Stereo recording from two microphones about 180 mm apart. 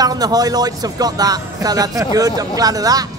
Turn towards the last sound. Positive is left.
turn(degrees=-20)  # may be behind; listen again after turning